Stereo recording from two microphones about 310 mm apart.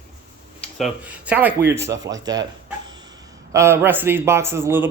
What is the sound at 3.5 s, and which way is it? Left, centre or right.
A man's voice, centre.